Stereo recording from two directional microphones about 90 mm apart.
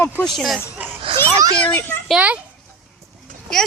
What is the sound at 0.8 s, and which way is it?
Speech, 15° right (ahead or behind).